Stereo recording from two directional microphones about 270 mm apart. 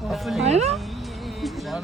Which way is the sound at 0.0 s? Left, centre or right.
Centre.